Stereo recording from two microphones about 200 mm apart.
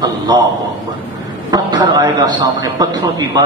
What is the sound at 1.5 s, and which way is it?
A man's voice, 20° right (ahead or behind).